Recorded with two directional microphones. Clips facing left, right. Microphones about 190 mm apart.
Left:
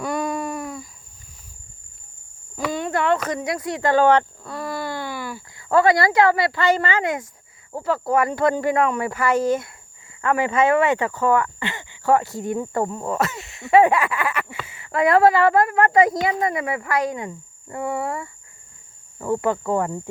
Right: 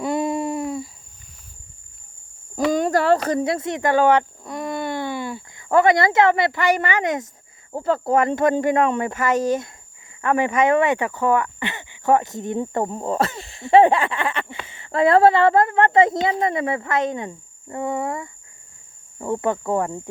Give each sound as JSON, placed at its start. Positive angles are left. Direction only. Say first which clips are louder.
{"t": 0.0, "sound": "hoot", "louder": "right 3 dB", "side_deg": -25}
{"t": 2.6, "sound": "speech", "louder": "right 4 dB", "side_deg": -40}
{"t": 7.7, "sound": "a sound", "louder": "right 2 dB", "side_deg": -25}